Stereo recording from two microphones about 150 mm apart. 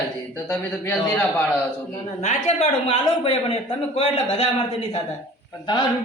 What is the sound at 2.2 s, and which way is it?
Speech, 45° left (ahead or behind).